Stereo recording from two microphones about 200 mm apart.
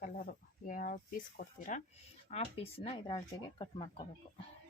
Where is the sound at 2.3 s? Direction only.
30° left (ahead or behind).